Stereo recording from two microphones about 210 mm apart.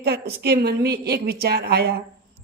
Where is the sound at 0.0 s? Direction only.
50° right (ahead or behind).